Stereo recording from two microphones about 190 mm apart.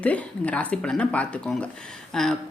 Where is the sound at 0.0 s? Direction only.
5° left (ahead or behind).